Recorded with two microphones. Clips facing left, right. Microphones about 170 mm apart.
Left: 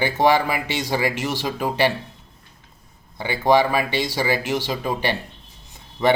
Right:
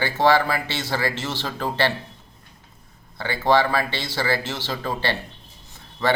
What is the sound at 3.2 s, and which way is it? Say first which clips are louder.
A man's voice: left 2 dB; 15° left (ahead or behind).